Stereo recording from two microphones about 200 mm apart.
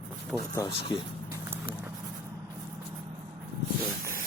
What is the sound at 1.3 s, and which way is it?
Clip-clop, 10° right (ahead or behind).